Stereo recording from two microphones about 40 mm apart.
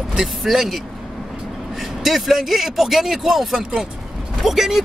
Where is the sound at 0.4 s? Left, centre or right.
Centre.